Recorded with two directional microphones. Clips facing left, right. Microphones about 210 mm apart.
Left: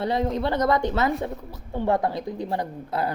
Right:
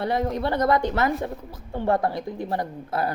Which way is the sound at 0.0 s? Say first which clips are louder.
Even; 20° left (ahead or behind).